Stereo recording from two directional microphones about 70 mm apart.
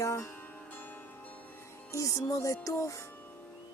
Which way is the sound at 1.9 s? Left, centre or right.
Left.